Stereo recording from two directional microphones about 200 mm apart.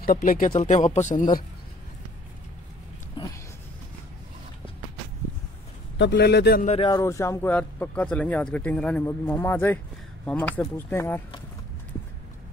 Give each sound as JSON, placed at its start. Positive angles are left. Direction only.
{"t": 0.0, "sound": "speech", "side_deg": 45}
{"t": 3.2, "sound": "a sound", "side_deg": 25}
{"t": 5.9, "sound": "a man's voice", "side_deg": 60}
{"t": 6.6, "sound": "speech", "side_deg": 30}
{"t": 7.0, "sound": "speech", "side_deg": 15}